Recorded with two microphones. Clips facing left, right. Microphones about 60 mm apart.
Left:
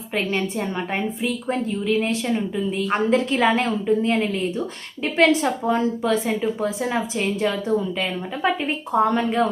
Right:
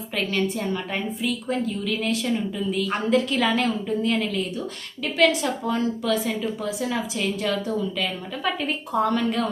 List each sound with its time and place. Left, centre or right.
1.2 s speech: left